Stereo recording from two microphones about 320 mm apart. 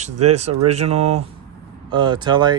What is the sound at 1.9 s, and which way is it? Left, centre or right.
Speech, centre.